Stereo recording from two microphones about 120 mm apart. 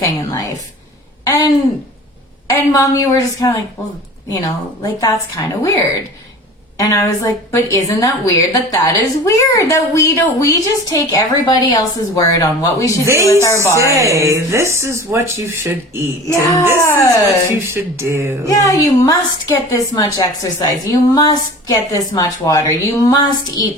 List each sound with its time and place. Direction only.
0.0 s a sound: 25° left (ahead or behind)
2.5 s a woman's voice: 25° left (ahead or behind)
13.8 s speech: 25° right (ahead or behind)
16.2 s speech: 25° left (ahead or behind)
17.5 s speech: 20° right (ahead or behind)
18.4 s a woman's voice: 30° left (ahead or behind)